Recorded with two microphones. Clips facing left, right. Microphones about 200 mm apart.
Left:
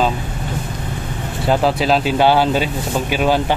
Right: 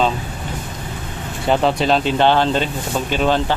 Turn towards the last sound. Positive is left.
turn(degrees=10)  # may be behind; listen again after turning